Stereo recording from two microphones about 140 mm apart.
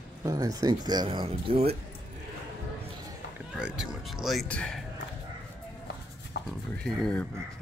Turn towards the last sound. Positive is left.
turn(degrees=5)  # may be behind; listen again after turning